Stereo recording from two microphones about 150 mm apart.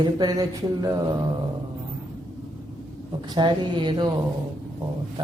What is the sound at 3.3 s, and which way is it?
Speech, 30° right (ahead or behind).